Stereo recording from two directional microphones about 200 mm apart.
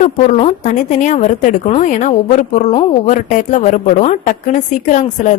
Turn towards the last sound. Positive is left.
turn(degrees=40)  # may be behind; listen again after turning